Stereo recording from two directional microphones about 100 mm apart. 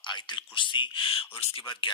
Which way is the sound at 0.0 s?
50° left (ahead or behind).